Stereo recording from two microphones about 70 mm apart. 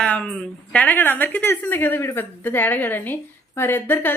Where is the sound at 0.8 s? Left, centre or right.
Left.